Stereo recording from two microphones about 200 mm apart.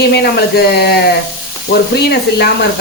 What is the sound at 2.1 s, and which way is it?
Speech, 55° left (ahead or behind).